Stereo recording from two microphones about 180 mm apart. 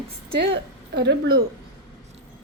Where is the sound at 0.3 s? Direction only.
70° right (ahead or behind).